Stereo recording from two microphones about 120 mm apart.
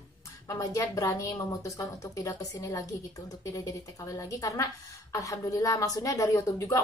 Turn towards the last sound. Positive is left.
turn(degrees=25)  # may be behind; listen again after turning